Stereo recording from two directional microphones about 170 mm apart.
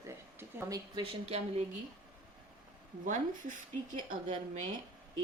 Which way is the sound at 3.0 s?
50° right (ahead or behind).